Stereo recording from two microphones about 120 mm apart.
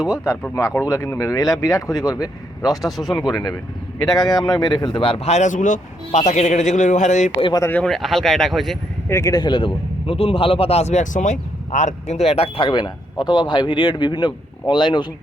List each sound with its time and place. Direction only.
0.5 s speech: 25° left (ahead or behind)
2.8 s speech: centre (ahead or behind)
3.2 s speech: 35° left (ahead or behind); by 7.3 s 85° left
7.7 s speech: 5° left (ahead or behind)
9.0 s a man's voice: 25° left (ahead or behind)